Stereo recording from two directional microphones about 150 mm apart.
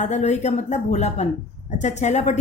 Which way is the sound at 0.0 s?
50° left (ahead or behind).